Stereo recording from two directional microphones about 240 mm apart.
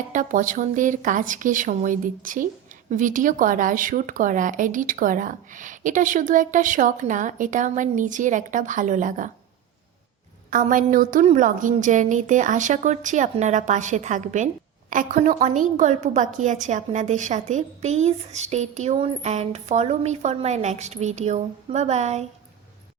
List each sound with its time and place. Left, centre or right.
0.1 s a woman's voice: right
10.5 s a woman's voice: right